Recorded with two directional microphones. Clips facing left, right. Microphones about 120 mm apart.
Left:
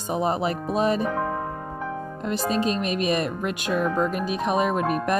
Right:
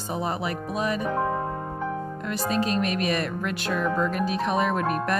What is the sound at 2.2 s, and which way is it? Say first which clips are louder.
Speech: left 3 dB; 25° left (ahead or behind).